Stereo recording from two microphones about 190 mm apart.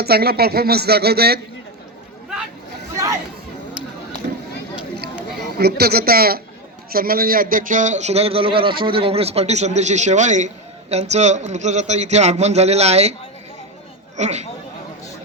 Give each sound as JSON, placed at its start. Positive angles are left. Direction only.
{"t": 0.0, "sound": "speech", "side_deg": -55}
{"t": 2.9, "sound": "chatter", "side_deg": -15}
{"t": 5.5, "sound": "a man's voice", "side_deg": -55}
{"t": 14.2, "sound": "a man's voice", "side_deg": -35}